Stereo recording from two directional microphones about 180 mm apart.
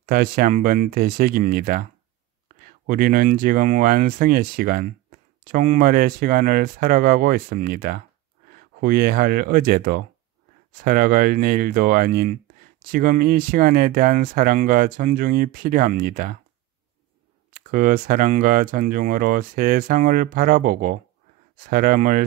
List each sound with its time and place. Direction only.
0.0 s speech: 50° right (ahead or behind)
17.5 s speech: 50° right (ahead or behind)